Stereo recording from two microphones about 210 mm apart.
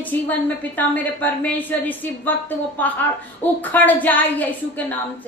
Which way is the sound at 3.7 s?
10° left (ahead or behind).